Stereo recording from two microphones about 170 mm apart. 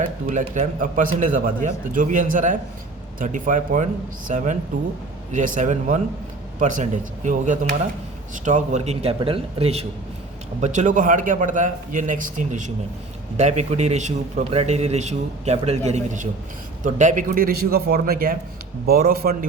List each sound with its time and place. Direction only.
0.3 s a man's voice: 45° right (ahead or behind)